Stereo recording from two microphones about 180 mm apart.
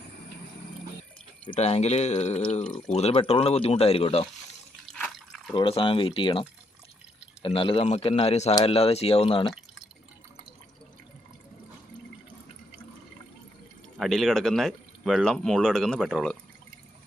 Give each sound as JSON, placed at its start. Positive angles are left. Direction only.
{"t": 1.5, "sound": "speech", "side_deg": 35}
{"t": 4.9, "sound": "drip", "side_deg": 5}
{"t": 5.5, "sound": "speech", "side_deg": 30}
{"t": 14.0, "sound": "speech", "side_deg": 0}